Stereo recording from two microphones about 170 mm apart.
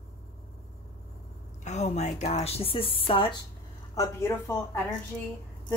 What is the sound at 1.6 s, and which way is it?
Speech, 40° left (ahead or behind).